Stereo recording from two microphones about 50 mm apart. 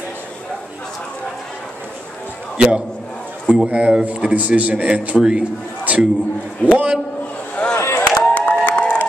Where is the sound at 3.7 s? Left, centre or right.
Right.